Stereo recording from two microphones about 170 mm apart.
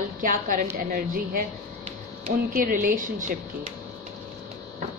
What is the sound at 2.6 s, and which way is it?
Speech, 50° right (ahead or behind).